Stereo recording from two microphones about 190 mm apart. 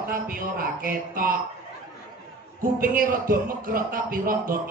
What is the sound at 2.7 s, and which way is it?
A man's voice, 50° right (ahead or behind).